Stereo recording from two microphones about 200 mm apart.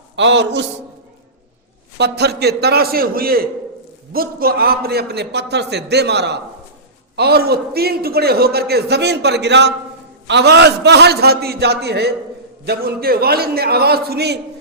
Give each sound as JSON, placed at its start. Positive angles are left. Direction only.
{"t": 0.2, "sound": "a man's voice", "side_deg": -60}
{"t": 2.0, "sound": "a man's voice", "side_deg": -55}